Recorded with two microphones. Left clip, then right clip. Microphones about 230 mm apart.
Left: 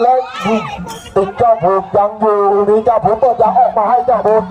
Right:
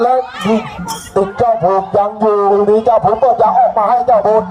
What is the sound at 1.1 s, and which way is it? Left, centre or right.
A man's voice, right.